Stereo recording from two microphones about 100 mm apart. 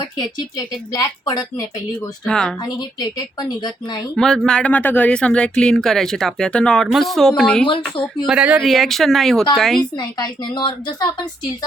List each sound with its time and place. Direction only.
0.2 s speech: 40° left (ahead or behind)
2.2 s speech: 5° left (ahead or behind)
2.6 s a woman's voice: 45° left (ahead or behind)
4.1 s speech: 5° left (ahead or behind)
8.3 s speech: 15° right (ahead or behind)
8.6 s speech: centre (ahead or behind)
10.0 s a woman's voice: 40° left (ahead or behind)